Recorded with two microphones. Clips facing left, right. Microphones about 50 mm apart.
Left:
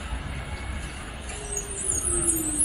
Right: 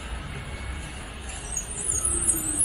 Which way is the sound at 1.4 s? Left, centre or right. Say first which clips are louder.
Left 3 dB; left.